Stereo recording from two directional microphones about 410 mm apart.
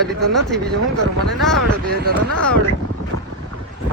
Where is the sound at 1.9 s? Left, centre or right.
Right.